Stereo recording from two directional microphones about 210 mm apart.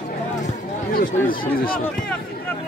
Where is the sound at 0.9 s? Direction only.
45° left (ahead or behind).